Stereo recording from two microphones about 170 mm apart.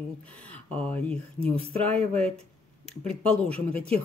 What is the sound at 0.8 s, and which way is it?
Speech, 10° left (ahead or behind).